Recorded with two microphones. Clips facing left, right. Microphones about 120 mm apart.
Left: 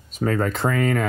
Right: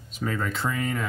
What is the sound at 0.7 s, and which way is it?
Speech, 70° left (ahead or behind).